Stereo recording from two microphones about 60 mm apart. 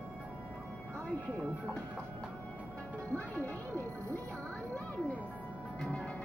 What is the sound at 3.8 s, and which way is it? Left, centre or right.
Speech, left.